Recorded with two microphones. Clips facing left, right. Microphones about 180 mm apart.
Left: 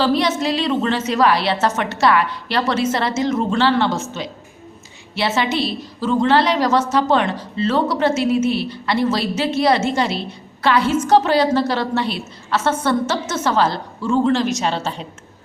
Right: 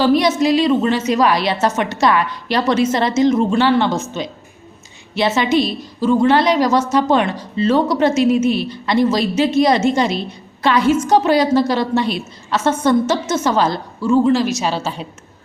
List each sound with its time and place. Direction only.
0.0 s a woman's voice: 15° right (ahead or behind)